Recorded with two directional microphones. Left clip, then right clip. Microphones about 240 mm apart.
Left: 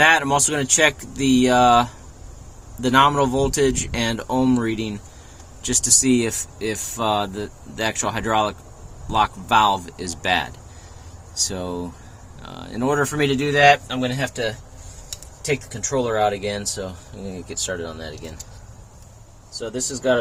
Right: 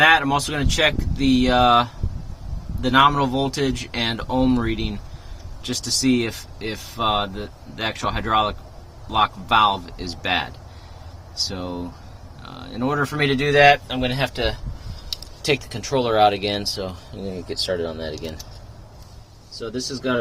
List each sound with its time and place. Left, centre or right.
0.0 s speech: centre
13.3 s speech: centre
14.2 s speech: centre
19.5 s speech: centre